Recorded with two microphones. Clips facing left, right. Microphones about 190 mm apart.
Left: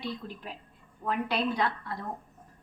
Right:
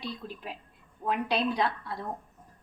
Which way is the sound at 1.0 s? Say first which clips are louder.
Right 1 dB; 20° right (ahead or behind).